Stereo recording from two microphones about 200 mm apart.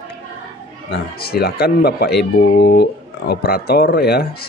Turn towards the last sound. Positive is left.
turn(degrees=50)  # may be behind; listen again after turning